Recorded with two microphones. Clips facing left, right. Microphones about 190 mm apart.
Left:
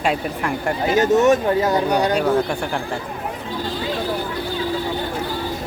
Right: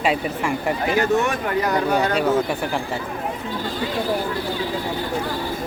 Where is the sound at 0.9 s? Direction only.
20° left (ahead or behind).